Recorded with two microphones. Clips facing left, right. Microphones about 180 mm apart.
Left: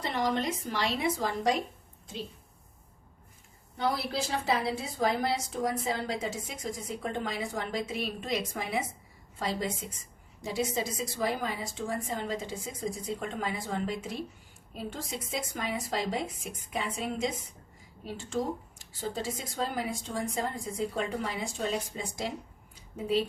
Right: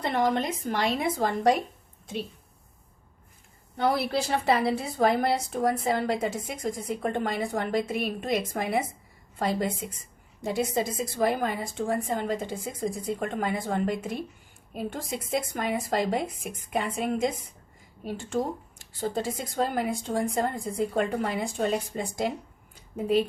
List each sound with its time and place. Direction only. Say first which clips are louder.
0.0 s a woman's voice: right 4 dB; 55° right (ahead or behind)
3.8 s a woman's voice: right 5 dB; 60° right (ahead or behind)
22.7 s a sound: right 5 dB; 55° right (ahead or behind)